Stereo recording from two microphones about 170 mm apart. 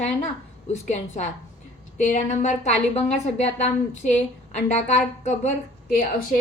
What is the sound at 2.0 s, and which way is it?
A woman's voice, 45° left (ahead or behind).